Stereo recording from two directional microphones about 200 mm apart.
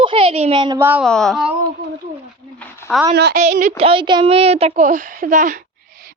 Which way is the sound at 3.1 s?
55° right (ahead or behind).